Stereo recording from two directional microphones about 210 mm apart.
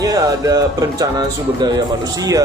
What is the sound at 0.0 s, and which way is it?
Speech, 15° right (ahead or behind).